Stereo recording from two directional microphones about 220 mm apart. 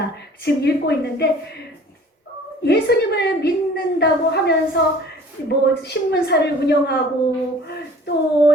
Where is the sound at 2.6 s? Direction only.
50° left (ahead or behind).